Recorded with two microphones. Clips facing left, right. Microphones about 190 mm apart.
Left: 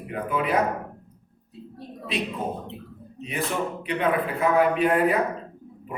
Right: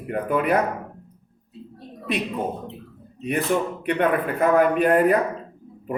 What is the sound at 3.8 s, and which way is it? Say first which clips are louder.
Speech: right 1 dB; 50° right (ahead or behind).